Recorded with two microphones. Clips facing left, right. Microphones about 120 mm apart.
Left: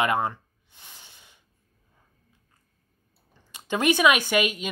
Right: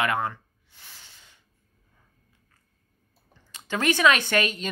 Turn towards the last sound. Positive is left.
turn(degrees=10)  # may be behind; listen again after turning